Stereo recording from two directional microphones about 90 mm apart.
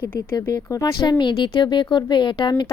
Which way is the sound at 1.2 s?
60° left (ahead or behind).